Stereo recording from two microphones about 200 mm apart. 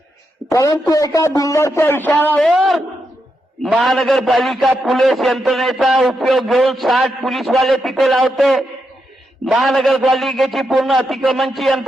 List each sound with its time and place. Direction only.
0.5 s a man's voice: 15° left (ahead or behind); by 11.8 s centre (ahead or behind)